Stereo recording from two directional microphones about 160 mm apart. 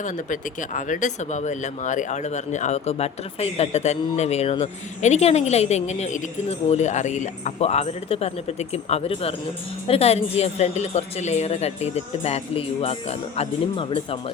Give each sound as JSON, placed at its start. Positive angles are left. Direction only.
{"t": 0.0, "sound": "a woman's voice", "side_deg": 55}